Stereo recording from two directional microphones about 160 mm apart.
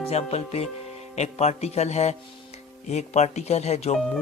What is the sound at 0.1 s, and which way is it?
Speech, 40° left (ahead or behind).